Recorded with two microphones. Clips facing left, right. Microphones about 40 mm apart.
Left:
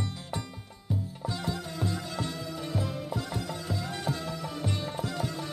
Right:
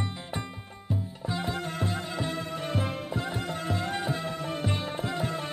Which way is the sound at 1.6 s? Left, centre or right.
Right.